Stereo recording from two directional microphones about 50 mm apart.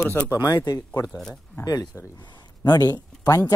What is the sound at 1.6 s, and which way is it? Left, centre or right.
Speech, left.